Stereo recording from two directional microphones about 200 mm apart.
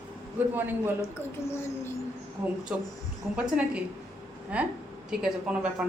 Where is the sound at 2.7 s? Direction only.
5° right (ahead or behind).